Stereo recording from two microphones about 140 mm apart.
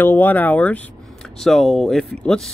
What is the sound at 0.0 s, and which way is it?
Speech, 15° left (ahead or behind).